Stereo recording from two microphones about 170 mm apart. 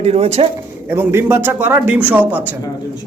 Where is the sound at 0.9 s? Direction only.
15° right (ahead or behind).